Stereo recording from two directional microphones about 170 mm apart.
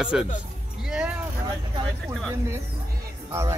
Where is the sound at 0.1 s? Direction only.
5° right (ahead or behind).